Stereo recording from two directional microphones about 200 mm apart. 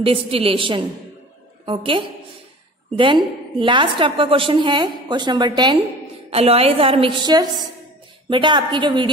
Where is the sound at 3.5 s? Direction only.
25° right (ahead or behind).